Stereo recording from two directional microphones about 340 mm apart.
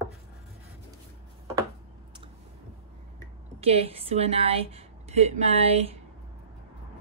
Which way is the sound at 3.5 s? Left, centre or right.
Centre.